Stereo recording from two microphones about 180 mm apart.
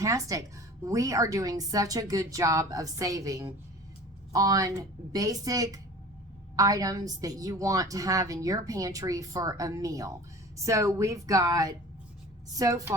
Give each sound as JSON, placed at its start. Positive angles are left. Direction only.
{"t": 0.0, "sound": "a woman's voice", "side_deg": -20}